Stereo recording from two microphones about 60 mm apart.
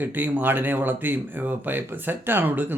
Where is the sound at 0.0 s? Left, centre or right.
Right.